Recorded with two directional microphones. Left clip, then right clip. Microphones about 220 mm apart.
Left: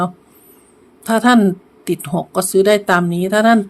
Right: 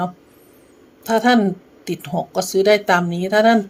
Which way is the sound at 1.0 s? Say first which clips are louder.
Left 3 dB; 10° left (ahead or behind).